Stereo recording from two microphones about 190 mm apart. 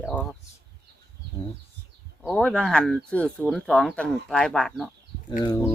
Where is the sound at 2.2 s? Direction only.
5° left (ahead or behind).